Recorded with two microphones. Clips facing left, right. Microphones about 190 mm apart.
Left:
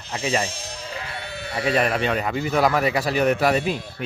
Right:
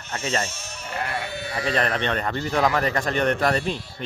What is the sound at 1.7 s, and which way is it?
A man's voice, 10° left (ahead or behind).